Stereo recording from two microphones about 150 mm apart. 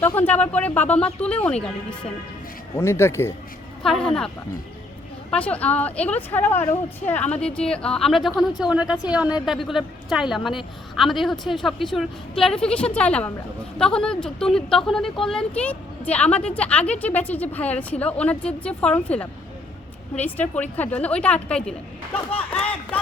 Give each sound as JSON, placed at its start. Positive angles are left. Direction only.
{"t": 0.0, "sound": "speech", "side_deg": 10}
{"t": 2.7, "sound": "speech", "side_deg": 15}
{"t": 3.8, "sound": "a woman's voice", "side_deg": 5}
{"t": 5.3, "sound": "a woman's voice", "side_deg": 10}